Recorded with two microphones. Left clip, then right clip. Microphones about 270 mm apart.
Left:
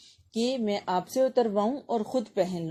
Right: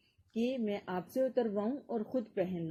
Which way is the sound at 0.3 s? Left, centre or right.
Centre.